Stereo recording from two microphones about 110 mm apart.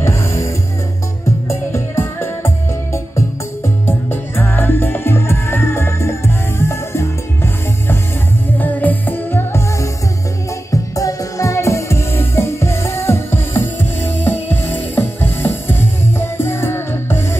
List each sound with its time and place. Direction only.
0.0 s music: 25° left (ahead or behind)
1.5 s music: 20° left (ahead or behind)
8.5 s music: 15° left (ahead or behind)